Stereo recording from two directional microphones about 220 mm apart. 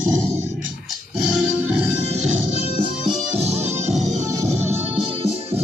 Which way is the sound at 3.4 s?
30° right (ahead or behind).